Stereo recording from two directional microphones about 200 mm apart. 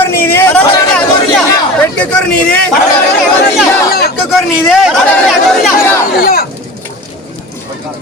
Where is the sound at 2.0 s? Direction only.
5° left (ahead or behind).